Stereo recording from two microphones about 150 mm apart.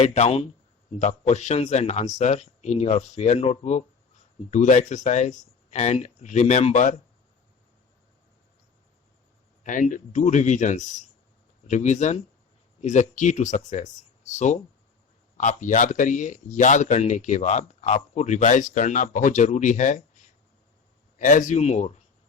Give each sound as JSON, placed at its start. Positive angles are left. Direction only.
{"t": 0.0, "sound": "a man's voice", "side_deg": 50}
{"t": 9.6, "sound": "a man's voice", "side_deg": 60}
{"t": 21.2, "sound": "a man's voice", "side_deg": 60}